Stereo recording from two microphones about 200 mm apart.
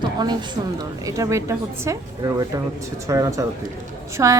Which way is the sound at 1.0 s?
15° right (ahead or behind).